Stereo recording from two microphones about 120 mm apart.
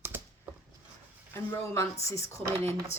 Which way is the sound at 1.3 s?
15° left (ahead or behind).